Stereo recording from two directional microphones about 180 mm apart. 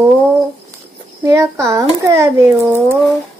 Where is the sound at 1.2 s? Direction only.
15° right (ahead or behind).